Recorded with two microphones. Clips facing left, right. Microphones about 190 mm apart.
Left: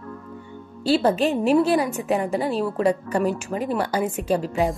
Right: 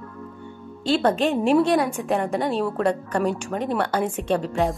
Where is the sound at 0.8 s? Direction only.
5° left (ahead or behind).